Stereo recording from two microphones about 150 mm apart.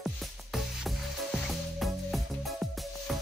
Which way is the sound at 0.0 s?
Centre (ahead or behind).